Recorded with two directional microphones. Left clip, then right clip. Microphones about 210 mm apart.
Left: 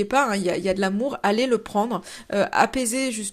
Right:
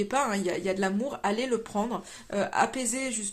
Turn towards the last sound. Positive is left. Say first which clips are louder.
# left 6 dB
turn(degrees=30)  # may be behind; listen again after turning